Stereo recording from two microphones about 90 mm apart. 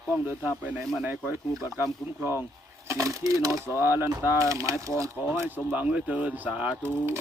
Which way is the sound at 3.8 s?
25° right (ahead or behind).